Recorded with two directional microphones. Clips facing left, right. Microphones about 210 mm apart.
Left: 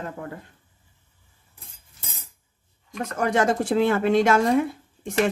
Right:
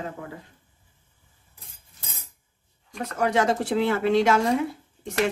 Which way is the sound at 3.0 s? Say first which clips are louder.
Left 1 dB; 50° left (ahead or behind).